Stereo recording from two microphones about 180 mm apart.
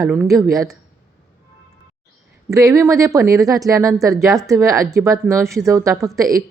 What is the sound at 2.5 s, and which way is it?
Speech, 15° right (ahead or behind).